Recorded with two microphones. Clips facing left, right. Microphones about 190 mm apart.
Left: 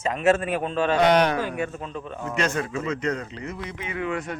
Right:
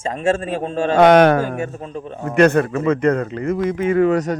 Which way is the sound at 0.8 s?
45° right (ahead or behind).